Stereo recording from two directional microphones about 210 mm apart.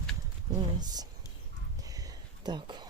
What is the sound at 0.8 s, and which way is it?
Speech, 20° right (ahead or behind).